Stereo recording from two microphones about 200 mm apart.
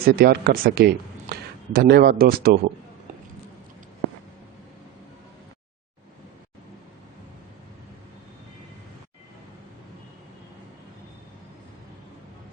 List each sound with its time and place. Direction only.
0.0 s a man's voice: 50° right (ahead or behind)